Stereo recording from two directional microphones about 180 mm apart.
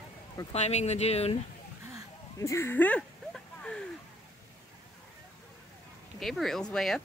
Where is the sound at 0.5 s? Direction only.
40° left (ahead or behind).